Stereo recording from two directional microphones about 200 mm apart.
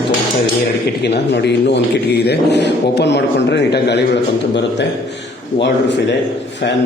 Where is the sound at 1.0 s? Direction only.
55° left (ahead or behind).